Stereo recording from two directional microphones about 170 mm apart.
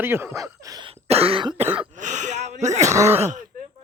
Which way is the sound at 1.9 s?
45° right (ahead or behind).